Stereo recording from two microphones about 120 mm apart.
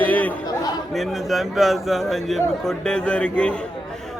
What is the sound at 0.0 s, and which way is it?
Speech, 15° left (ahead or behind).